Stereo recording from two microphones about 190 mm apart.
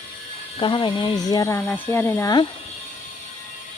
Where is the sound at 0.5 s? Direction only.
25° left (ahead or behind).